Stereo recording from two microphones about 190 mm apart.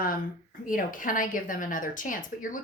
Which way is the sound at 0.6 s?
45° left (ahead or behind).